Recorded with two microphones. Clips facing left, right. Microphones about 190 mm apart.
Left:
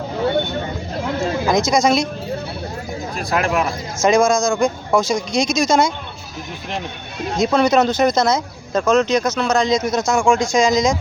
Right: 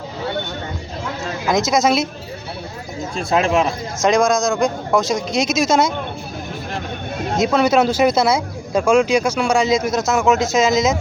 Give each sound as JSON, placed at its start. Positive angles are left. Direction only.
{"t": 1.5, "sound": "speech", "side_deg": 0}
{"t": 3.2, "sound": "speech", "side_deg": -25}
{"t": 4.0, "sound": "speech", "side_deg": 0}
{"t": 7.3, "sound": "speech", "side_deg": -5}